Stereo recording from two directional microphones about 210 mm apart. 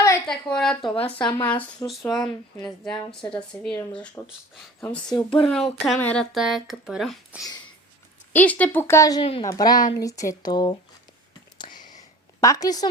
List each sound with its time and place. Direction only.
0.0 s a sound: 5° left (ahead or behind)
0.8 s speech: 25° left (ahead or behind)
1.5 s speech: 5° left (ahead or behind)
3.5 s speech: 5° left (ahead or behind)
9.2 s speech: 25° left (ahead or behind)
11.5 s a sound: 20° left (ahead or behind)
12.4 s speech: 15° left (ahead or behind)